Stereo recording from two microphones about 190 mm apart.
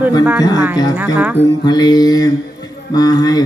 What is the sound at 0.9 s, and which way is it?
Speech, 10° right (ahead or behind).